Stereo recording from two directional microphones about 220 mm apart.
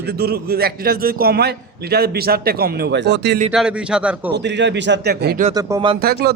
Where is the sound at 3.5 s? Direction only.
5° right (ahead or behind).